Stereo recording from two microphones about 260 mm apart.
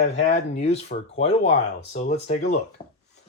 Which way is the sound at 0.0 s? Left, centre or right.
Left.